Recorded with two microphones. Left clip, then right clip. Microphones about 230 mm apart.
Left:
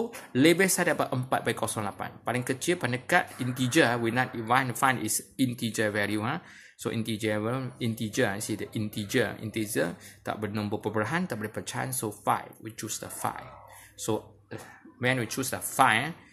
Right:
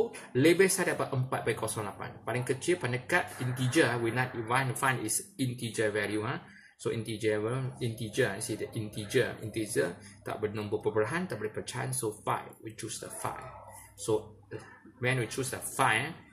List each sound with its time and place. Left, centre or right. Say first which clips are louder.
0.1 s speech: left 3 dB; left
15.0 s speech: left 3 dB; left